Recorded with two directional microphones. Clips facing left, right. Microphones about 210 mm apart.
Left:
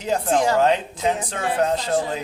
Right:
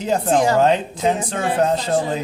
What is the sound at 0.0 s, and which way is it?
A woman's voice, 30° right (ahead or behind).